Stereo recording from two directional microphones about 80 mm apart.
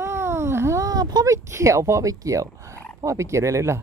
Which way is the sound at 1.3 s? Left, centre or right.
Right.